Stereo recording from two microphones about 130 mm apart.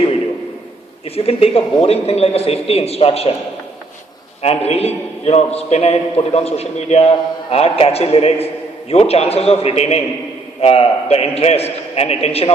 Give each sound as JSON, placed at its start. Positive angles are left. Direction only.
{"t": 1.0, "sound": "a man's voice", "side_deg": 50}
{"t": 4.4, "sound": "a man's voice", "side_deg": 55}